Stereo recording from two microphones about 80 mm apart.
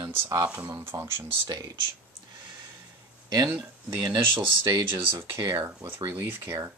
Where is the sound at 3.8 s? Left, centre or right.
Right.